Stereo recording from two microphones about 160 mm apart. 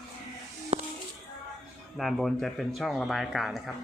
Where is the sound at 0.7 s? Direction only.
40° right (ahead or behind).